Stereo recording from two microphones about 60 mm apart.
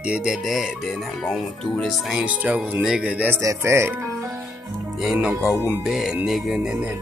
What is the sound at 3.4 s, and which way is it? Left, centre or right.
Speech, right.